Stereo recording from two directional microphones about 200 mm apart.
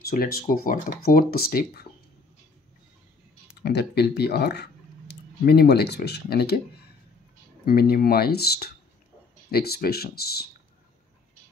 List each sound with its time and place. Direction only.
0.0 s speech: 50° left (ahead or behind)
3.6 s speech: 55° left (ahead or behind)